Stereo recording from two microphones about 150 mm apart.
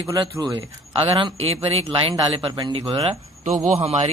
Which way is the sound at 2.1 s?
30° right (ahead or behind).